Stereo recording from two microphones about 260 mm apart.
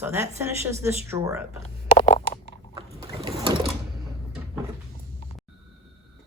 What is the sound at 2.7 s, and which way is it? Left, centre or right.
Boat, centre.